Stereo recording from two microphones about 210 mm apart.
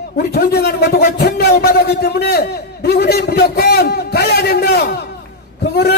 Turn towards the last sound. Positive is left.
turn(degrees=50)  # may be behind; listen again after turning